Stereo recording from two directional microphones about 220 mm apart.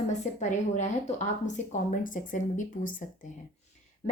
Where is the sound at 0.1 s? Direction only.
30° left (ahead or behind).